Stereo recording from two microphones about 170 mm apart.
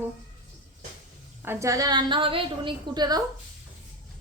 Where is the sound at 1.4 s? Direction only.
20° right (ahead or behind).